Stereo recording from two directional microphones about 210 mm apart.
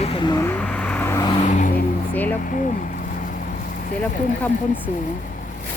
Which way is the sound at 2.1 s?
5° left (ahead or behind).